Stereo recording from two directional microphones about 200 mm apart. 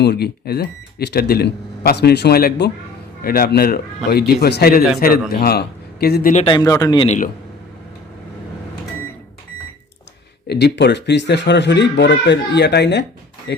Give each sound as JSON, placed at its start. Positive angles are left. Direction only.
{"t": 0.0, "sound": "speech", "side_deg": 55}
{"t": 6.3, "sound": "speech", "side_deg": 25}
{"t": 10.4, "sound": "speech", "side_deg": 55}